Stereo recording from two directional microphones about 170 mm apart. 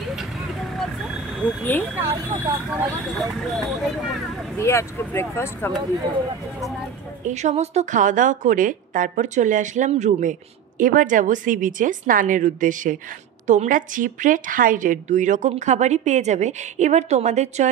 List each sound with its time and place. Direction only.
1.6 s speech: 10° left (ahead or behind)
2.0 s speech: 15° right (ahead or behind)
3.2 s speech: centre (ahead or behind)
4.6 s speech: 15° left (ahead or behind)
7.2 s speech: 40° right (ahead or behind)